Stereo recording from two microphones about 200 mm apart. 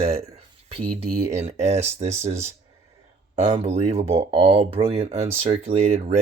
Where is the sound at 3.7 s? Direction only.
30° right (ahead or behind).